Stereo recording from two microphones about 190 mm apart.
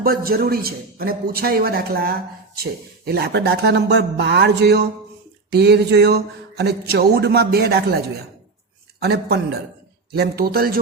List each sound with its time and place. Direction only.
0.0 s a man's voice: 50° right (ahead or behind)